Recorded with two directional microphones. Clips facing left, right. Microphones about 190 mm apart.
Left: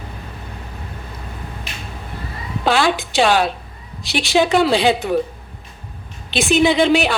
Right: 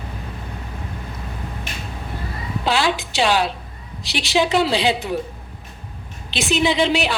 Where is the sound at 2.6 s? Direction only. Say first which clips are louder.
Left 3 dB; 50° left (ahead or behind).